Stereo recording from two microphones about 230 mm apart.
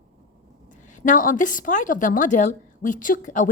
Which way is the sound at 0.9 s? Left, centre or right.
Left.